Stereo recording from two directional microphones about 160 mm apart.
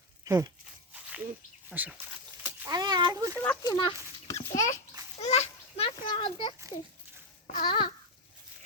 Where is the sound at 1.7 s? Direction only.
10° right (ahead or behind).